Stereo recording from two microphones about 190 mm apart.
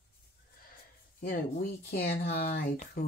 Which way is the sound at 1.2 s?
50° left (ahead or behind).